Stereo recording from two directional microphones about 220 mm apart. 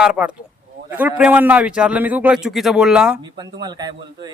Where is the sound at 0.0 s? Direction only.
5° right (ahead or behind).